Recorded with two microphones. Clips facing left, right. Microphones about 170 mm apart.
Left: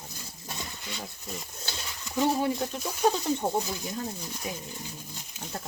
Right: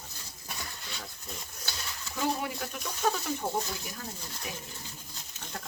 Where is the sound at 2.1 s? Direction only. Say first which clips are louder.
Left 6 dB; 25° left (ahead or behind).